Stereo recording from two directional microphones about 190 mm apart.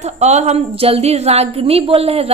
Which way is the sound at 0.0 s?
35° right (ahead or behind).